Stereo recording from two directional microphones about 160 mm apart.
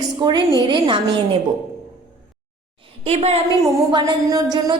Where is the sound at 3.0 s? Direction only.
40° right (ahead or behind).